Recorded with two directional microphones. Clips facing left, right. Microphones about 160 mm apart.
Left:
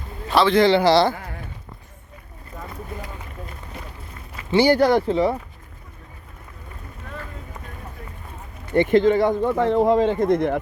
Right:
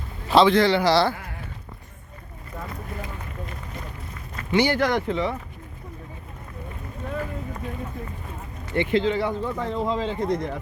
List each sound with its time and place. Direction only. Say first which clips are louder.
0.6 s speech: left 4 dB; 25° left (ahead or behind)
4.5 s speech: left 5 dB; 35° left (ahead or behind)
8.7 s speech: left 6 dB; 45° left (ahead or behind)